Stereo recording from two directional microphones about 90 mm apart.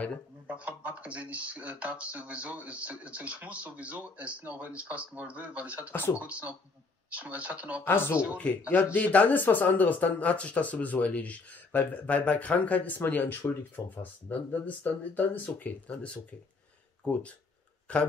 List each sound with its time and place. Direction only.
0.5 s speech: 15° right (ahead or behind)
5.9 s speech: 25° left (ahead or behind)
6.1 s speech: 15° right (ahead or behind)
7.8 s speech: 25° left (ahead or behind)